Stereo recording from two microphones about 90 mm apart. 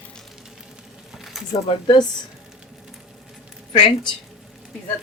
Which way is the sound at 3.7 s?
65° left (ahead or behind).